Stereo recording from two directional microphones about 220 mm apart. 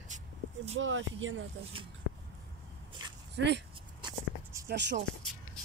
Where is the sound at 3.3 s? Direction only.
50° right (ahead or behind).